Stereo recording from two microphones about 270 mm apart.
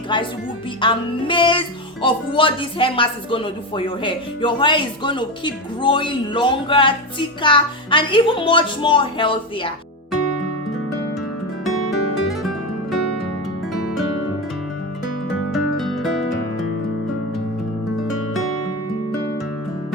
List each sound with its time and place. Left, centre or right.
0.1 s music: centre
15.5 s music: centre